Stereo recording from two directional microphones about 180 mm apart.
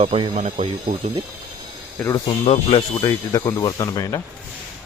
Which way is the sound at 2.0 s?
20° left (ahead or behind).